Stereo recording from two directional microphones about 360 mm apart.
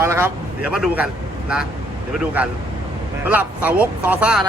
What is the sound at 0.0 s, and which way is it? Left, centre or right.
Speech, centre.